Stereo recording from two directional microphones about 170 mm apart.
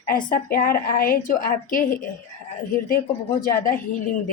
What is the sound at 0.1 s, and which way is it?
A woman's voice, 55° left (ahead or behind).